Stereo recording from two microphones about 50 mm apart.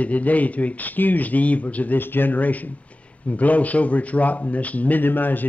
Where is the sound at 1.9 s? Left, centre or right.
Left.